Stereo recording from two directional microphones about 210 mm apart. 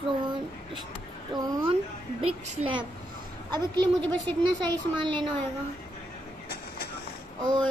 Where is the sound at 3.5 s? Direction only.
20° right (ahead or behind).